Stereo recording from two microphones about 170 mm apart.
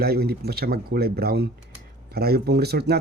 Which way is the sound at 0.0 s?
65° right (ahead or behind).